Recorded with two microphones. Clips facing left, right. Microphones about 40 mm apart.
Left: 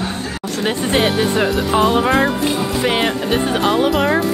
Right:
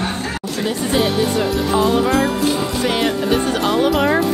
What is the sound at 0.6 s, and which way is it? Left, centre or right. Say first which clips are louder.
Speech: left 2 dB; left.